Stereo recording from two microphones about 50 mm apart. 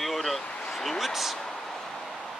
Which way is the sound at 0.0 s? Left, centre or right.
Centre.